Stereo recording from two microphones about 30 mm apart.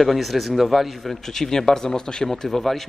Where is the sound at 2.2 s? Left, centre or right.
Centre.